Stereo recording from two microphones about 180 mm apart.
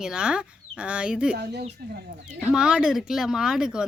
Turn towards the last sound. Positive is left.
turn(degrees=-5)  # may be behind; listen again after turning